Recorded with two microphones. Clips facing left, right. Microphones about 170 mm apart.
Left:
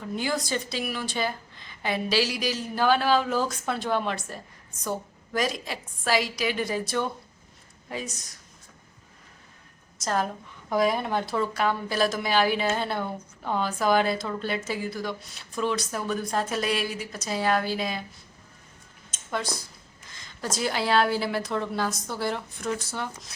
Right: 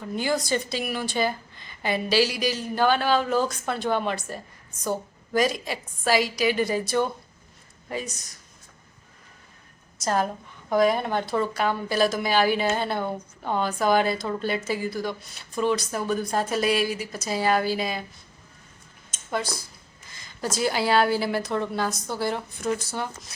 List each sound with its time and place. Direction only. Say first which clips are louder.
0.2 s a woman's voice: right 4 dB; centre (ahead or behind)
10.0 s a woman's voice: right 3 dB; centre (ahead or behind)
19.1 s a sound: right 2 dB; 5° right (ahead or behind)
20.1 s a woman's voice: right 3 dB; 5° right (ahead or behind)